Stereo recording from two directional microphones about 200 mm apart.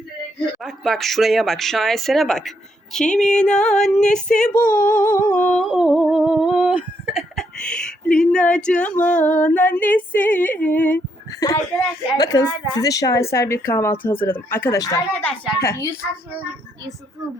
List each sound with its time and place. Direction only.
0.6 s speech: centre (ahead or behind)
4.5 s a sound: 45° left (ahead or behind)
5.3 s humming: 5° left (ahead or behind)
12.1 s a woman's voice: 20° left (ahead or behind)